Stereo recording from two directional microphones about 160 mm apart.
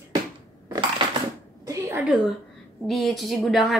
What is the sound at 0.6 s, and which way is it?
Crushing, 25° right (ahead or behind).